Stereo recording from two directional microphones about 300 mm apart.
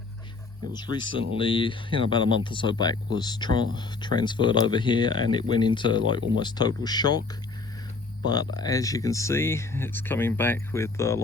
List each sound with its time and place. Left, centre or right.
0.7 s speech: centre
8.5 s speech: centre